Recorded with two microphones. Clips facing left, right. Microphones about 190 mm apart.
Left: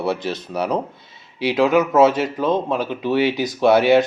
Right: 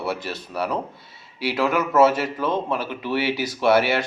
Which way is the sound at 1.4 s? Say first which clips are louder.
Left 6 dB; 20° left (ahead or behind).